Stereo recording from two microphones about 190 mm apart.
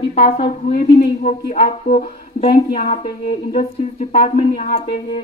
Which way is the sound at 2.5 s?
30° left (ahead or behind).